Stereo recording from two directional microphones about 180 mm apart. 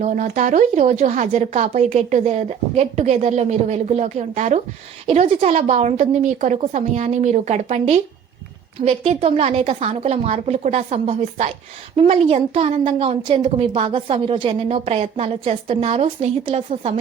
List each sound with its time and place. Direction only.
0.0 s a woman's voice: 45° right (ahead or behind)